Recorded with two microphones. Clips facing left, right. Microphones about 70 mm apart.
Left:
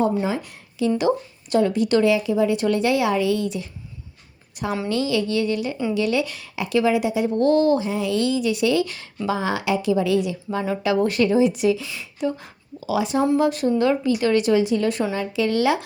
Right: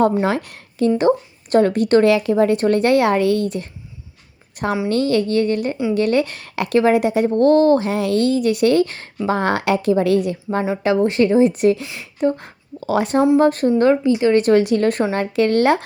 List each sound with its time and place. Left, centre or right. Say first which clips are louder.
0.0 s a woman's voice: right 5 dB; right
0.9 s speech: right 4 dB; right
4.9 s speech: right 4 dB; right
7.3 s speech: right 5 dB; right
7.8 s speech: right 4 dB; right
10.8 s speech: right 3 dB; right
14.4 s speech: right 4 dB; right